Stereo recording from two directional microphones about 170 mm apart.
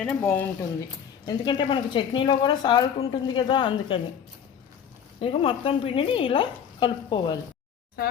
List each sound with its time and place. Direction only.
0.0 s speech: 10° left (ahead or behind)
1.2 s a woman's voice: 25° left (ahead or behind)
5.2 s speech: 35° left (ahead or behind)